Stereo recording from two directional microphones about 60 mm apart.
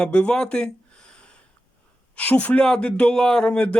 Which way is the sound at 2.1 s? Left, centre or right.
Left.